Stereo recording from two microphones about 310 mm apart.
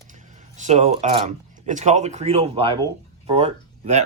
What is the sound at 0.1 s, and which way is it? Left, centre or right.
Speech, right.